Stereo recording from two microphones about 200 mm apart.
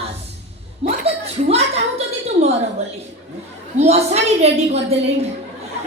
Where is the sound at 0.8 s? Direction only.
30° right (ahead or behind).